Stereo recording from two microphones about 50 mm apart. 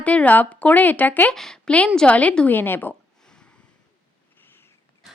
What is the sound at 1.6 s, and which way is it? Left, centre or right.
Speech, left.